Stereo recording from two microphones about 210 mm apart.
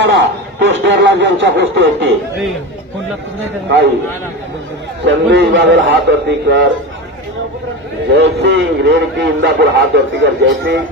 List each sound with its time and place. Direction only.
0.1 s speech: 60° right (ahead or behind)
5.0 s speech: 55° right (ahead or behind)
8.1 s speech: 55° right (ahead or behind)